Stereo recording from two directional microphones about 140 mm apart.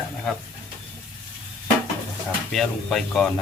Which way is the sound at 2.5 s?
Centre (ahead or behind).